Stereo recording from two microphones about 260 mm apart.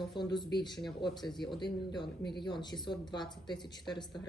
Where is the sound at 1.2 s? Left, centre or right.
Centre.